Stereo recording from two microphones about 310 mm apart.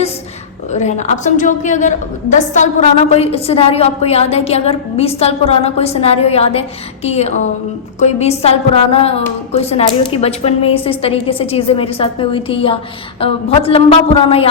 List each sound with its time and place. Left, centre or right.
0.7 s a woman's voice: left